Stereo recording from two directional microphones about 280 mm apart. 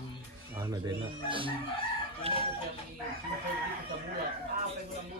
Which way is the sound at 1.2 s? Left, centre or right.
Centre.